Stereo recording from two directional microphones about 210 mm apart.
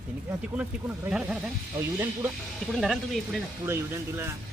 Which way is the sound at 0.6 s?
5° right (ahead or behind).